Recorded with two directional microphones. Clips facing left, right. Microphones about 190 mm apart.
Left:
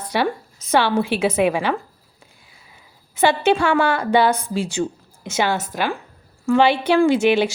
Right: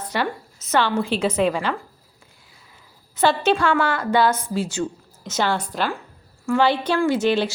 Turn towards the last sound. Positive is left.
turn(degrees=10)  # may be behind; listen again after turning